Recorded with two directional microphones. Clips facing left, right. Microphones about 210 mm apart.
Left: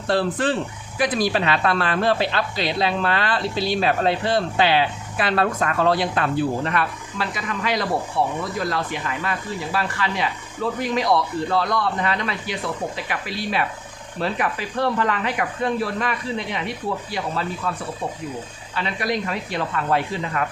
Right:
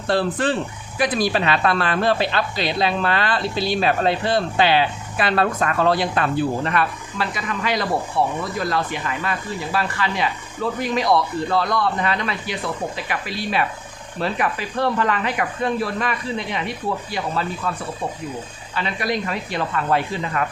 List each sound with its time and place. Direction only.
0.1 s speech: 5° left (ahead or behind)
6.7 s speech: 20° left (ahead or behind)
18.7 s speech: 30° left (ahead or behind)